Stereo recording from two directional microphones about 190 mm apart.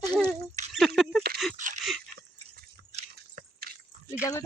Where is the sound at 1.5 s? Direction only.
40° right (ahead or behind).